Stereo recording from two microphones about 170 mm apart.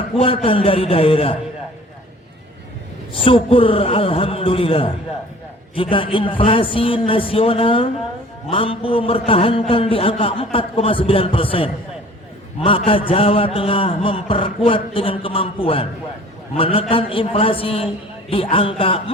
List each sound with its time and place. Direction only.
0.2 s a man's voice: 35° left (ahead or behind)
3.1 s a man's voice: 30° left (ahead or behind)